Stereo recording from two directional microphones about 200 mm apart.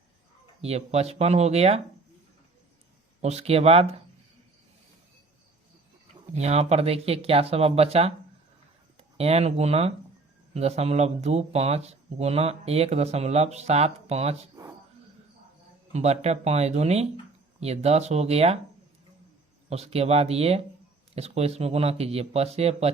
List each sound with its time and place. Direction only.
0.6 s speech: 30° right (ahead or behind)
3.2 s speech: 30° right (ahead or behind)
6.3 s speech: 35° right (ahead or behind)
9.1 s speech: 30° right (ahead or behind)
15.9 s speech: 35° right (ahead or behind)
19.7 s speech: 30° right (ahead or behind)